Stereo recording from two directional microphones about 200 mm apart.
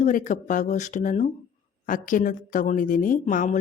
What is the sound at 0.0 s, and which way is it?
Speech, 40° left (ahead or behind).